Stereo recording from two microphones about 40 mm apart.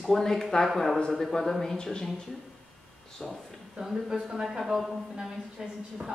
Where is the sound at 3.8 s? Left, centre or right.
Centre.